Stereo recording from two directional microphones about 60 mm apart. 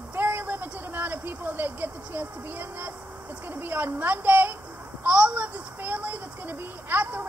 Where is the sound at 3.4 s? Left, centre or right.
Right.